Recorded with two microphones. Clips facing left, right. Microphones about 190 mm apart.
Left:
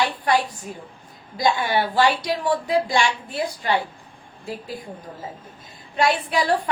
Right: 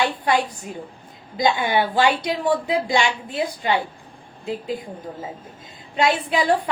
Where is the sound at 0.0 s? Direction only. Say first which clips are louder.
Right 1 dB; 25° right (ahead or behind).